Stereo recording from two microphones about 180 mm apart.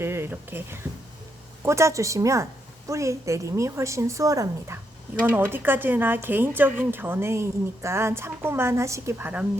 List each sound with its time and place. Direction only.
0.0 s a woman's voice: 15° right (ahead or behind)